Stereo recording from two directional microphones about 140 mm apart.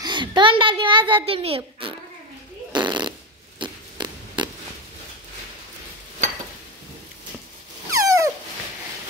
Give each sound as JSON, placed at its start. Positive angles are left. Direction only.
{"t": 0.0, "sound": "a child's voice", "side_deg": -30}
{"t": 2.7, "sound": "fart", "side_deg": -30}
{"t": 8.0, "sound": "dog", "side_deg": -25}